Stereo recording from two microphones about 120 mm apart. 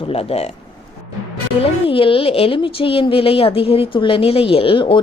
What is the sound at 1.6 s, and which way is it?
A woman's voice, 50° left (ahead or behind).